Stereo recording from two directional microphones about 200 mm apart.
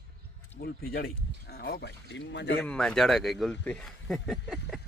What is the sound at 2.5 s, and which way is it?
Speech, 5° left (ahead or behind).